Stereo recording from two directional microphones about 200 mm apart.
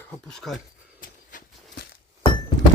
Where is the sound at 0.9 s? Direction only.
45° left (ahead or behind).